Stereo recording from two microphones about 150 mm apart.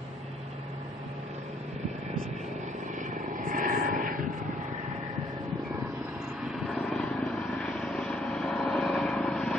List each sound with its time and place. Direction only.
3.0 s vehicle: 65° right (ahead or behind)
6.5 s vehicle: centre (ahead or behind)